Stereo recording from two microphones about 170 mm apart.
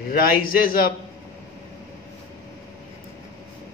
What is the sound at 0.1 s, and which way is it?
Speech, 60° left (ahead or behind).